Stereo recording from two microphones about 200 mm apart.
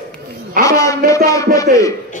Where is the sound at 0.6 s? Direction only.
15° left (ahead or behind).